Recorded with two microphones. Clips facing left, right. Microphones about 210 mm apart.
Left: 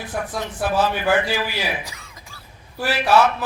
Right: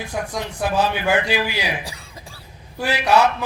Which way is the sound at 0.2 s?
15° right (ahead or behind).